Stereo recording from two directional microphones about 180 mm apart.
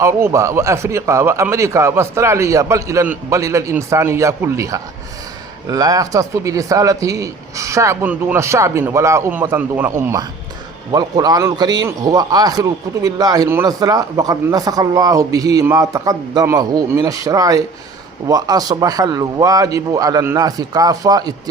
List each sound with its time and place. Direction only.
0.0 s a man's voice: 15° right (ahead or behind)